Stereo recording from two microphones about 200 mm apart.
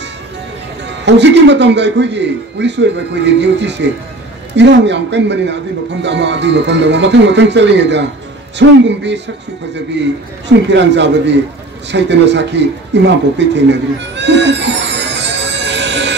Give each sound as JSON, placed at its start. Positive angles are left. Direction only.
{"t": 0.8, "sound": "a man's voice", "side_deg": -60}
{"t": 10.7, "sound": "a man's voice", "side_deg": -60}
{"t": 11.9, "sound": "a sound", "side_deg": -60}